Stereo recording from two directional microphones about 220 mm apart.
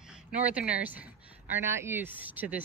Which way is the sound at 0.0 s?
5° right (ahead or behind).